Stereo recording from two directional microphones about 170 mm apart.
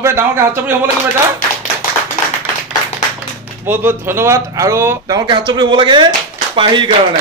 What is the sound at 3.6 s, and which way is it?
Speech, 15° right (ahead or behind).